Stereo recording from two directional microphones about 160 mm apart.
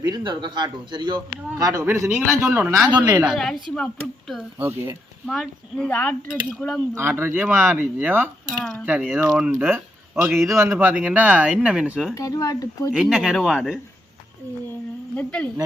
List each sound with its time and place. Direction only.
0.0 s a man's voice: 30° right (ahead or behind); by 2.7 s 10° right (ahead or behind)
2.9 s a man's voice: 25° right (ahead or behind)
3.2 s a woman's voice: centre (ahead or behind)
4.5 s a man's voice: 15° right (ahead or behind)
5.2 s a woman's voice: 5° left (ahead or behind)
6.9 s a man's voice: 15° right (ahead or behind)
8.6 s a woman's voice: centre (ahead or behind)
9.5 s a man's voice: 15° right (ahead or behind)
12.1 s speech: 20° left (ahead or behind)
12.9 s a woman's voice: 5° right (ahead or behind)
15.1 s a woman's voice: 10° left (ahead or behind)